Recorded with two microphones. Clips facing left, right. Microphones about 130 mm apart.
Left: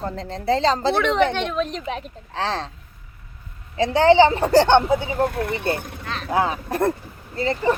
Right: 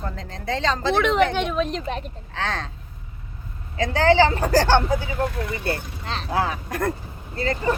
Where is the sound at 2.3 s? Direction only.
30° left (ahead or behind).